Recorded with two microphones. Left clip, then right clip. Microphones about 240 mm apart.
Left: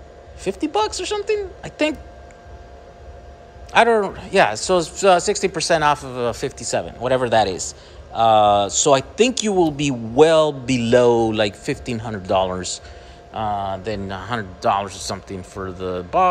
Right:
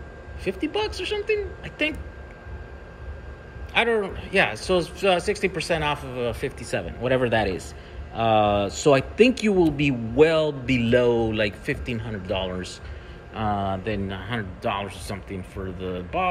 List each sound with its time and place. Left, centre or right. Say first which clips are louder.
0.4 s speech: left 6 dB; centre
3.9 s a man's voice: left 5 dB; left
13.3 s a man's voice: left 3 dB; centre